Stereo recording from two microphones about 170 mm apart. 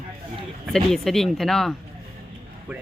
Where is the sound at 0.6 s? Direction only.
Centre (ahead or behind).